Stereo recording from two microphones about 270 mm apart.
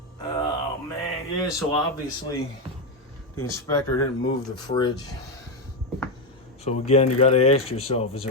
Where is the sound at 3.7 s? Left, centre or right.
Centre.